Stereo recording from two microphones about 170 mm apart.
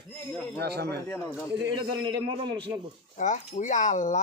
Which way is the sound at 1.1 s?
15° left (ahead or behind).